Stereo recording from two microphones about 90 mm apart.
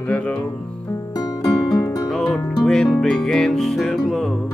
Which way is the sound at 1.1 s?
45° left (ahead or behind).